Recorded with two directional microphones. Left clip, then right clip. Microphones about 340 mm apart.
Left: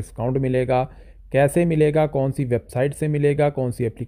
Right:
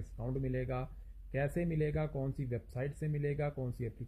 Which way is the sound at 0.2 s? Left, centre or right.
Left.